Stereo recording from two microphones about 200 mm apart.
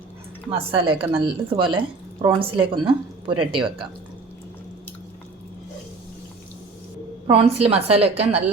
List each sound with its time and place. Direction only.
0.5 s a woman's voice: 25° right (ahead or behind)
7.3 s a woman's voice: 30° right (ahead or behind)